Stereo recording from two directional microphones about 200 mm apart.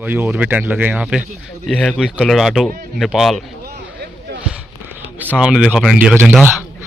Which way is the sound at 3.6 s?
55° right (ahead or behind).